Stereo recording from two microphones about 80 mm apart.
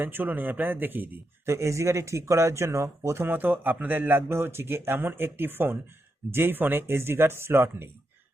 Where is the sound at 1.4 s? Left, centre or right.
Right.